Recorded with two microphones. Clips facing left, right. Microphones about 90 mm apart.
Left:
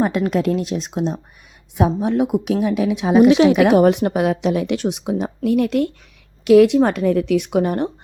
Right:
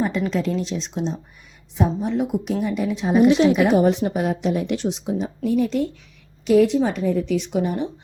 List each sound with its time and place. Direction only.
0.0 s speech: 55° left (ahead or behind)
1.7 s a woman's voice: 65° left (ahead or behind)
6.4 s a woman's voice: 80° left